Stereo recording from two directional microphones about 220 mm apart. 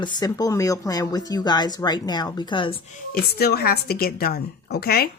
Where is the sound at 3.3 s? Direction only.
45° left (ahead or behind).